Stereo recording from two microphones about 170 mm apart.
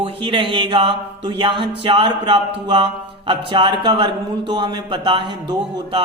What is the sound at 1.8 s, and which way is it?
A man's voice, 30° right (ahead or behind).